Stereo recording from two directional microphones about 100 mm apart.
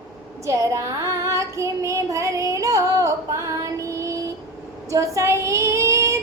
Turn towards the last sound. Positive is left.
turn(degrees=-30)  # may be behind; listen again after turning